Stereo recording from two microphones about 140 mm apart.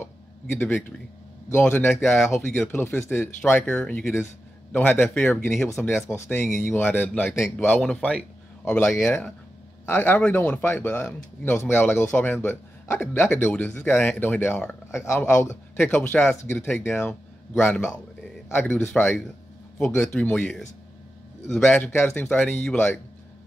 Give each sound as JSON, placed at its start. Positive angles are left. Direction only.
{"t": 1.5, "sound": "speech", "side_deg": 15}
{"t": 6.3, "sound": "speech", "side_deg": 0}
{"t": 6.6, "sound": "speech", "side_deg": 15}